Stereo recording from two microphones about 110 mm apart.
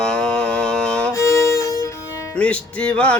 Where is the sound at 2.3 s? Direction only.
10° left (ahead or behind).